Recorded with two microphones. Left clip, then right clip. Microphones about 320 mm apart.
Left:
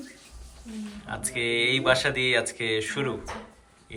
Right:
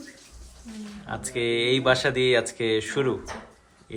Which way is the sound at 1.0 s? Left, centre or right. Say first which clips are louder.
Right 1 dB; centre.